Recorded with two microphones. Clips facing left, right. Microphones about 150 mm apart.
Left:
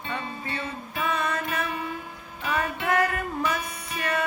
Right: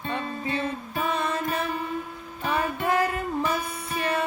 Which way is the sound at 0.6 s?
35° right (ahead or behind).